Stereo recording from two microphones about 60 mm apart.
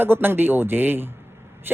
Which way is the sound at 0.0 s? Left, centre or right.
Right.